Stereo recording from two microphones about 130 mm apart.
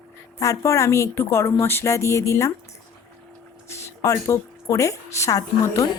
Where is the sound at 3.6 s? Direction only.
20° left (ahead or behind).